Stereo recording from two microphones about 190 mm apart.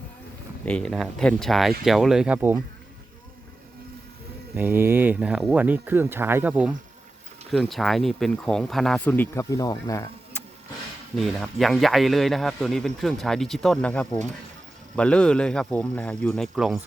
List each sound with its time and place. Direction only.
0.6 s a man's voice: 5° left (ahead or behind)
4.5 s a man's voice: 10° right (ahead or behind); by 10.4 s 15° left (ahead or behind)
11.1 s a man's voice: centre (ahead or behind)